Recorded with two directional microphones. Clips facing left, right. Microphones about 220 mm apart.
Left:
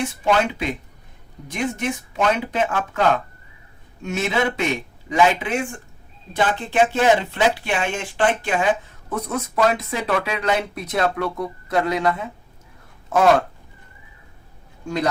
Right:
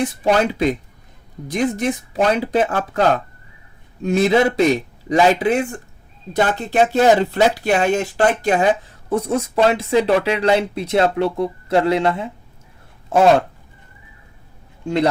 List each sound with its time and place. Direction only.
0.0 s a man's voice: 35° right (ahead or behind)